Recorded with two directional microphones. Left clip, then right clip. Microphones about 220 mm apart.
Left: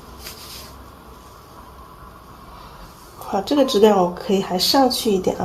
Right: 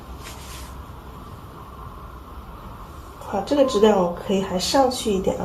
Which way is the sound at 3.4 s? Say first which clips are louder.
Left 2 dB; 45° left (ahead or behind).